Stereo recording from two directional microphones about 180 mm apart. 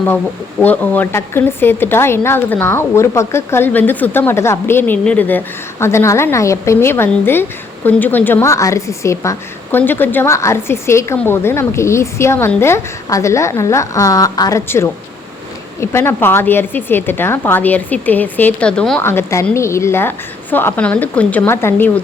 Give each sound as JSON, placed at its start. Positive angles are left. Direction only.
{"t": 0.6, "sound": "a woman's voice", "side_deg": 10}